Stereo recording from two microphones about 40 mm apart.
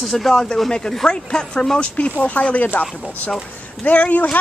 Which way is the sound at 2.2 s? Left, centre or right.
Left.